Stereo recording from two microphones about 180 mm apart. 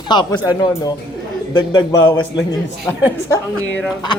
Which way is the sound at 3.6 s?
10° left (ahead or behind).